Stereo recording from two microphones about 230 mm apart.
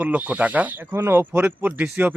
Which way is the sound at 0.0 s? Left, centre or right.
Centre.